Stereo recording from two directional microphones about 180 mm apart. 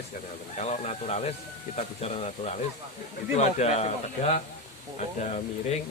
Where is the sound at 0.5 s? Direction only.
40° left (ahead or behind).